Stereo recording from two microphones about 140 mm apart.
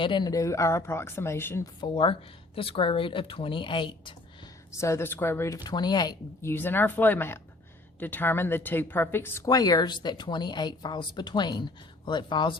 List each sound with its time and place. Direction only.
0.0 s speech: 35° left (ahead or behind); by 1.7 s 15° left (ahead or behind)
1.8 s a woman's voice: 35° left (ahead or behind)
4.8 s speech: 20° left (ahead or behind)
6.4 s a woman's voice: 15° left (ahead or behind); by 12.5 s 35° left (ahead or behind)